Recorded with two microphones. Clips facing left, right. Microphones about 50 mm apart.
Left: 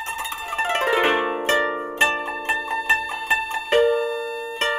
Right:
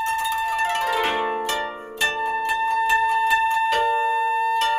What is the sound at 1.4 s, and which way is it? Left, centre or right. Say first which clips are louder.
Harp: left 5 dB; left.